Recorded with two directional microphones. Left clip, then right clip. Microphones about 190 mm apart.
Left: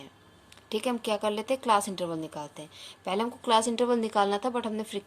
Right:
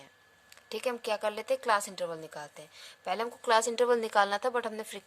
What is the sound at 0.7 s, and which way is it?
A woman's voice, 35° right (ahead or behind).